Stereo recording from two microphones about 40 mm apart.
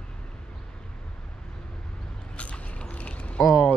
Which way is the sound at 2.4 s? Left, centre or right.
Left.